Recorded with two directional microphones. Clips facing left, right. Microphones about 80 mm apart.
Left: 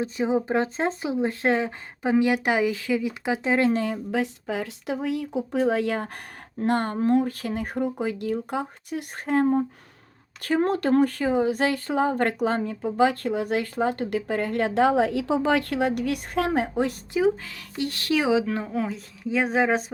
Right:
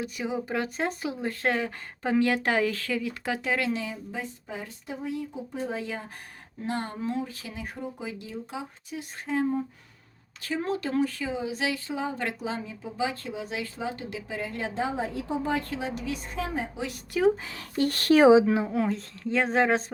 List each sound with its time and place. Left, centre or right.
0.0 s speech: left
3.7 s speech: left
4.1 s speech: left
6.6 s speech: left
17.2 s speech: centre
17.7 s speech: right
18.4 s speech: centre